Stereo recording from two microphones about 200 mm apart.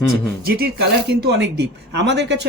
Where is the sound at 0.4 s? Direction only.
50° right (ahead or behind).